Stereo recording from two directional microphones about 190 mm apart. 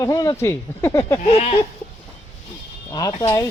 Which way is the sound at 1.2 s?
35° left (ahead or behind).